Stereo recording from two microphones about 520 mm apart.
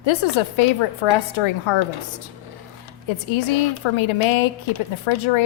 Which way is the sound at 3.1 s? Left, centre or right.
Left.